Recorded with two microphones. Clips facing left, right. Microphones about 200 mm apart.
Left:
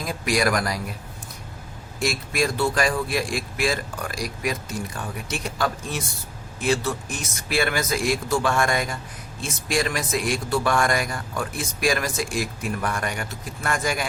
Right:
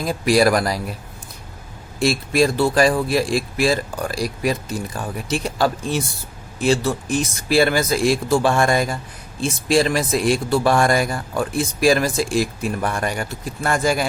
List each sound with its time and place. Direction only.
0.1 s speech: 30° right (ahead or behind)
2.0 s speech: 30° right (ahead or behind)